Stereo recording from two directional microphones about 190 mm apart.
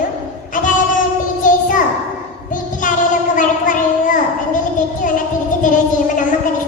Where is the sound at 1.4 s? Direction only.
45° left (ahead or behind).